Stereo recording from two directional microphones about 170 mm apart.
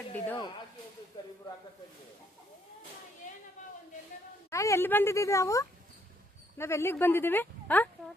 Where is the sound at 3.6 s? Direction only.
45° left (ahead or behind).